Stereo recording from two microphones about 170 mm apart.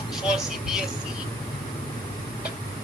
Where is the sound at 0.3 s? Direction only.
5° right (ahead or behind).